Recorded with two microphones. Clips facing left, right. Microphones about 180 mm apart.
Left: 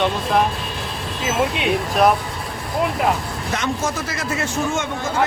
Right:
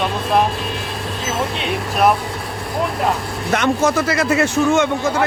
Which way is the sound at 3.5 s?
70° right (ahead or behind).